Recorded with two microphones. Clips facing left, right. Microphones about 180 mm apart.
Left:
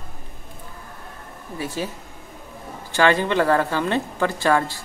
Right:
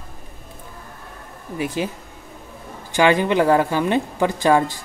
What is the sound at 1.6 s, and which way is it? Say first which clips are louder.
Speech: right 4 dB; 15° right (ahead or behind).